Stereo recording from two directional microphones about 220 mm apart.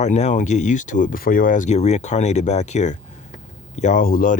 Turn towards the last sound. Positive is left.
turn(degrees=40)  # may be behind; listen again after turning